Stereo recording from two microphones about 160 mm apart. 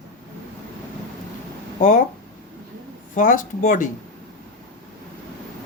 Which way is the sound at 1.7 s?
55° left (ahead or behind).